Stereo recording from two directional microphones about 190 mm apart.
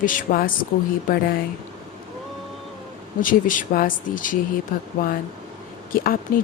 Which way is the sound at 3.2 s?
45° left (ahead or behind).